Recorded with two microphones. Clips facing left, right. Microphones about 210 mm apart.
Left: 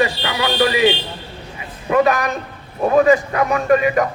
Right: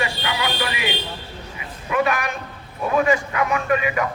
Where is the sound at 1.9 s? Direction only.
40° left (ahead or behind).